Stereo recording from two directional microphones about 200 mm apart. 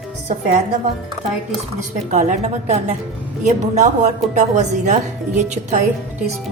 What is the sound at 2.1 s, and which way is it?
A woman's voice, 35° right (ahead or behind).